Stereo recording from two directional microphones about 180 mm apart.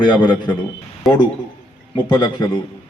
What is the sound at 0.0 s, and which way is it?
Speech, 25° left (ahead or behind).